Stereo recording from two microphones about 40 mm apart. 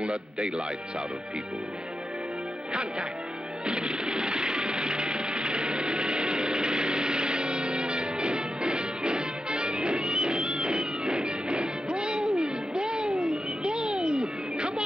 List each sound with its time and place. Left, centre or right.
0.1 s speech: centre
2.7 s speech: right
3.6 s music: right
14.0 s cat: centre